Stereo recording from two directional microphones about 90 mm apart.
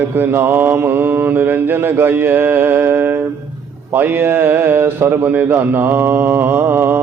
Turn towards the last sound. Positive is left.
turn(degrees=-25)  # may be behind; listen again after turning